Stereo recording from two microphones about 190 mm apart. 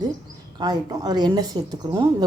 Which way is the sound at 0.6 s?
20° right (ahead or behind).